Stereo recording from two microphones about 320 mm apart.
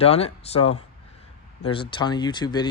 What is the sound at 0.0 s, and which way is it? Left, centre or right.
Speech, centre.